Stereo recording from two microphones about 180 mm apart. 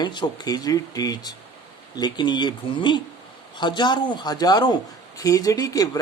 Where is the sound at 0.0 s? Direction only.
25° left (ahead or behind).